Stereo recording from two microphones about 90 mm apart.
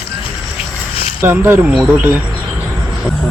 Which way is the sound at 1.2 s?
25° right (ahead or behind).